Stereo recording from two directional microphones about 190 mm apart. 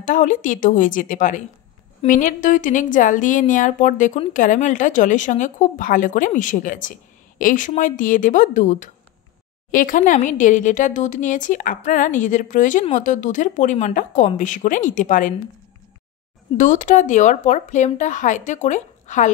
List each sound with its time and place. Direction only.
0.0 s a woman's voice: 45° left (ahead or behind)
16.5 s speech: 40° left (ahead or behind)